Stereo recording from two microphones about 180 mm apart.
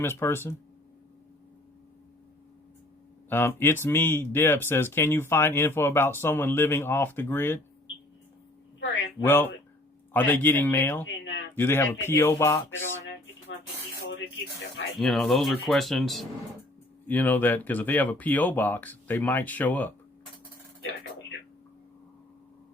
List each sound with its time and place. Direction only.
0.0 s speech: 15° left (ahead or behind)
3.2 s speech: 10° left (ahead or behind)
9.2 s speech: 15° left (ahead or behind)
11.0 s a sound: 90° left
11.5 s speech: 10° left (ahead or behind)
14.9 s speech: centre (ahead or behind)